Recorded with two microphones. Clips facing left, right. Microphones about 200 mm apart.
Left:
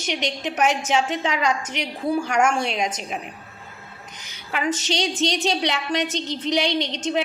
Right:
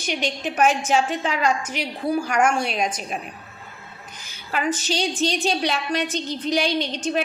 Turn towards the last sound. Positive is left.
turn(degrees=20)  # may be behind; listen again after turning